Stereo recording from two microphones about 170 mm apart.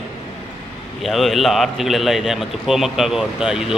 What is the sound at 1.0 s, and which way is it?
A man's voice, centre (ahead or behind).